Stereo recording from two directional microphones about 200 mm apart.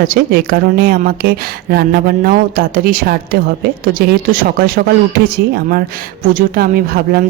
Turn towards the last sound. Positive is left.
turn(degrees=-50)  # may be behind; listen again after turning